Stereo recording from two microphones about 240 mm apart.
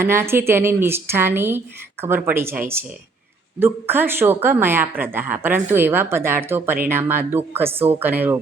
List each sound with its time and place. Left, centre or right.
0.0 s a woman's voice: centre